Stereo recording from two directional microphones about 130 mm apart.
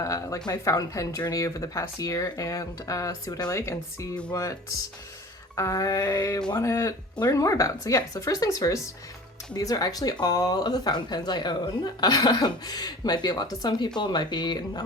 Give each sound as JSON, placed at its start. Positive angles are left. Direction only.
{"t": 0.0, "sound": "speech", "side_deg": 25}
{"t": 5.5, "sound": "speech", "side_deg": 25}